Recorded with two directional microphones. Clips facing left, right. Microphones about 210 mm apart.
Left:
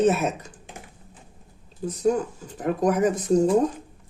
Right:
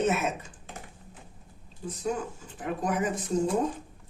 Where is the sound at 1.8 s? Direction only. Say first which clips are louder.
Left 9 dB; 40° left (ahead or behind).